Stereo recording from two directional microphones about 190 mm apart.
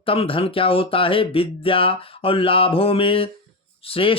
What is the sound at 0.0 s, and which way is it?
Speech, 30° left (ahead or behind).